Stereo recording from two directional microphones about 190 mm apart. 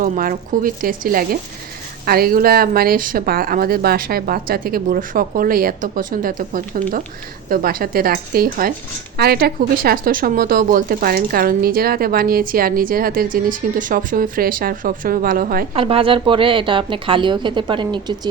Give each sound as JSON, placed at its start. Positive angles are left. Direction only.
{"t": 0.0, "sound": "a woman's voice", "side_deg": -50}
{"t": 15.7, "sound": "a woman's voice", "side_deg": -30}